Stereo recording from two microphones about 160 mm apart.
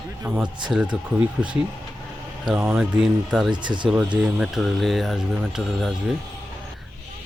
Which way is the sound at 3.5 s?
30° right (ahead or behind).